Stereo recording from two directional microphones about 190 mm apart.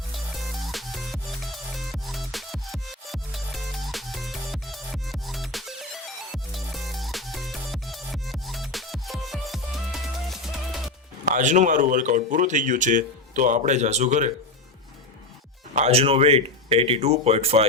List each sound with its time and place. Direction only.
0.1 s music: centre (ahead or behind)
11.3 s speech: 40° right (ahead or behind)
15.7 s speech: 35° right (ahead or behind)